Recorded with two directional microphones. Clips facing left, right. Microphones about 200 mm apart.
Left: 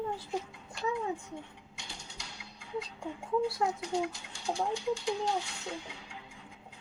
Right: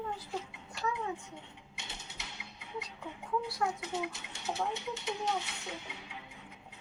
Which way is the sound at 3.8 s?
20° right (ahead or behind).